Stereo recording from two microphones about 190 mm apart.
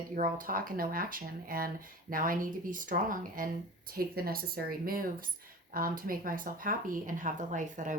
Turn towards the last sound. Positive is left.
turn(degrees=-40)  # may be behind; listen again after turning